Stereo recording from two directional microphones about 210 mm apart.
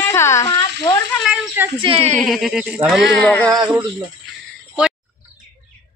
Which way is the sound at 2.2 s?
Centre (ahead or behind).